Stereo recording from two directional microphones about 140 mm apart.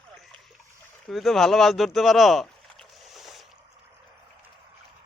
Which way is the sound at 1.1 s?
Centre (ahead or behind).